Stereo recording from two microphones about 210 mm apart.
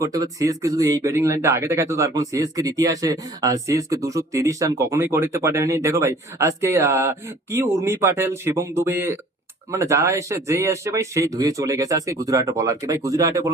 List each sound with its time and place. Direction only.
0.0 s speech: 15° right (ahead or behind)